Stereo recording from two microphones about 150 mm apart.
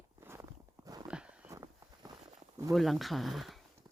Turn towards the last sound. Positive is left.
turn(degrees=0)  # may be behind; listen again after turning